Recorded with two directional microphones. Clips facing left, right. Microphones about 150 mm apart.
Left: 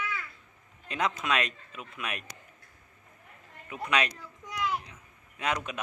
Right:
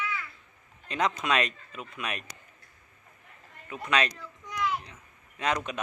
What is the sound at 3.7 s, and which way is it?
Speech, 10° left (ahead or behind).